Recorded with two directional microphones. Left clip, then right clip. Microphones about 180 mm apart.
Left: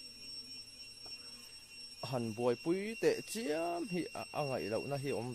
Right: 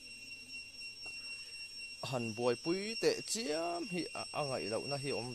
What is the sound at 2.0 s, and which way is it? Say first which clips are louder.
Speech: even; 5° left (ahead or behind).